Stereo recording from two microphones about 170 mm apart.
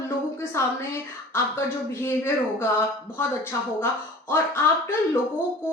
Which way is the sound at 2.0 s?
15° left (ahead or behind).